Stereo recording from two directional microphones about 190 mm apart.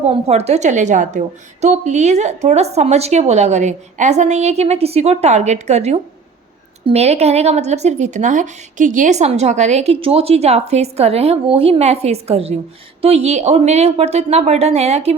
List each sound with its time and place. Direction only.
0.0 s a woman's voice: 35° right (ahead or behind)